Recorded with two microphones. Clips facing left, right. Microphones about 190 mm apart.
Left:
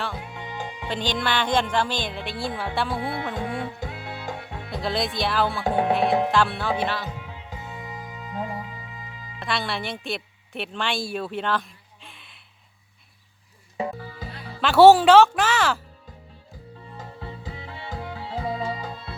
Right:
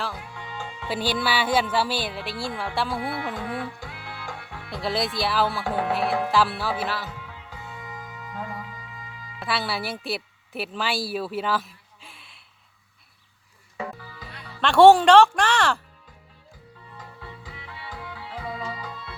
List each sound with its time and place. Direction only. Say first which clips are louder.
0.1 s music: left 3 dB; 20° left (ahead or behind)
0.9 s speech: right 1 dB; 10° right (ahead or behind)
2.9 s music: left 1 dB; 25° left (ahead or behind)
4.7 s speech: even; centre (ahead or behind)
5.6 s music: left 4 dB; 20° left (ahead or behind)
6.3 s speech: left 1 dB; 5° right (ahead or behind)
7.0 s music: left 3 dB; 20° left (ahead or behind)
9.4 s a woman's voice: even; 5° right (ahead or behind)
13.7 s music: left 5 dB; 25° left (ahead or behind)
14.6 s speech: left 1 dB; 5° left (ahead or behind)
16.8 s music: left 4 dB; 30° left (ahead or behind)